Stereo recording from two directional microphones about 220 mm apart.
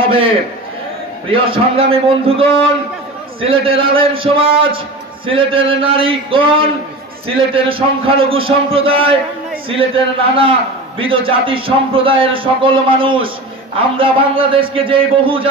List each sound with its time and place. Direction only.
1.3 s speech: 25° right (ahead or behind)